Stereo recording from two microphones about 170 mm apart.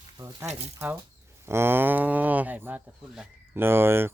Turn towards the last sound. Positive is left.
turn(degrees=-15)  # may be behind; listen again after turning